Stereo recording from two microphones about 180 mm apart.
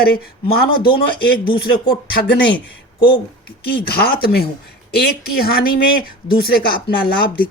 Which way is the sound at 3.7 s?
60° left (ahead or behind).